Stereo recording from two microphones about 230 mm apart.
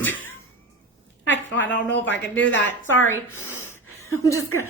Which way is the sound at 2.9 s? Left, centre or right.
Centre.